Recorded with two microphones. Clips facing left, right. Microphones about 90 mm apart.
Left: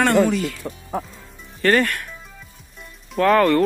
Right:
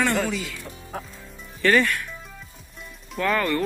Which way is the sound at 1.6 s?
50° left (ahead or behind).